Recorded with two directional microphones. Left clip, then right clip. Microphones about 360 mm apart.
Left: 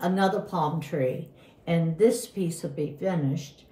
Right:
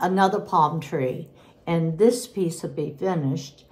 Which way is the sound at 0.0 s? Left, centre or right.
Centre.